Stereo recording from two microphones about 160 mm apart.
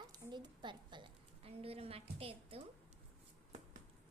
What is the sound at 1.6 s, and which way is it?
Speech, 35° right (ahead or behind).